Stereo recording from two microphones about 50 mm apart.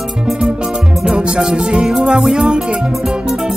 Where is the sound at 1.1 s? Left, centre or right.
Centre.